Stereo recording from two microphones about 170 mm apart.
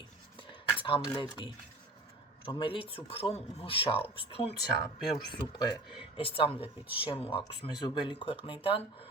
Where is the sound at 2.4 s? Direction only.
30° left (ahead or behind).